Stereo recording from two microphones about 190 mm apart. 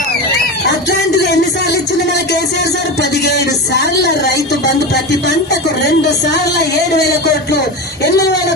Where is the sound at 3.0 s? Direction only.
60° left (ahead or behind).